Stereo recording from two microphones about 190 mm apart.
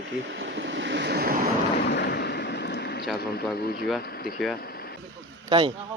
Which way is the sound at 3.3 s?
55° left (ahead or behind).